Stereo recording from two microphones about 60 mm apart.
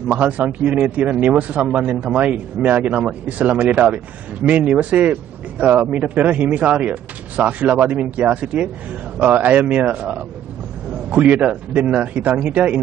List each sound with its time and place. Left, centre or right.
0.1 s speech: right